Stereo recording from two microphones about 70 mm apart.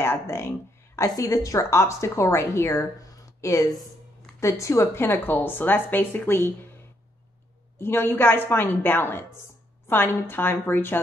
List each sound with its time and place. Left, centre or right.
0.0 s speech: left
3.3 s speech: left
5.0 s speech: left
7.8 s a woman's voice: left